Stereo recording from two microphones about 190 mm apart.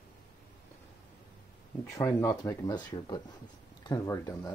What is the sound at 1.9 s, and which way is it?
Speech, 15° left (ahead or behind).